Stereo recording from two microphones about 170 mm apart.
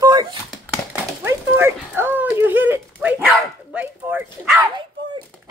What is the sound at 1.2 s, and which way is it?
Speech, 15° right (ahead or behind).